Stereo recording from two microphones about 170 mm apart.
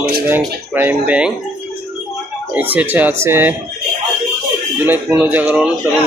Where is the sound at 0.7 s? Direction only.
10° right (ahead or behind).